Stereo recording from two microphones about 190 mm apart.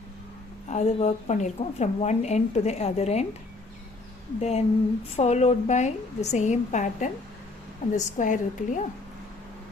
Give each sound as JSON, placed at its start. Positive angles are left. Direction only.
{"t": 0.7, "sound": "a woman's voice", "side_deg": 35}
{"t": 4.4, "sound": "a woman's voice", "side_deg": 35}